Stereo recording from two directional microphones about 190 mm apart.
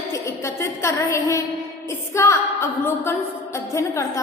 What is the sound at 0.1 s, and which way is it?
A woman's voice, 15° left (ahead or behind).